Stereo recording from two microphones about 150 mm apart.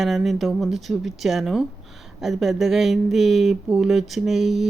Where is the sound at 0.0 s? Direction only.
Centre (ahead or behind).